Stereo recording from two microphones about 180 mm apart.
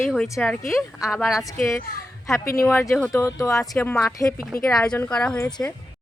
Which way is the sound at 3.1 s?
15° left (ahead or behind).